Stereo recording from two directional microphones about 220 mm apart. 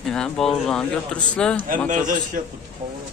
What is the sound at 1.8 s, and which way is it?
Speech, 35° right (ahead or behind).